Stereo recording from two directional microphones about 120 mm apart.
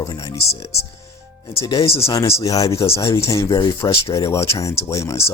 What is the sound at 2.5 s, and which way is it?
Speech, 30° left (ahead or behind).